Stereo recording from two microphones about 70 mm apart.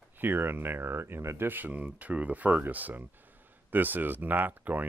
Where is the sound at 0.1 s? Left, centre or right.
Right.